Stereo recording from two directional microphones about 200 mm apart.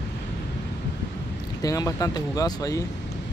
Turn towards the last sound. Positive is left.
turn(degrees=15)  # may be behind; listen again after turning